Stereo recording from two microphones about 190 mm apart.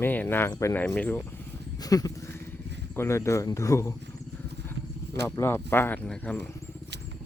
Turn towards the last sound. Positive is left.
turn(degrees=10)  # may be behind; listen again after turning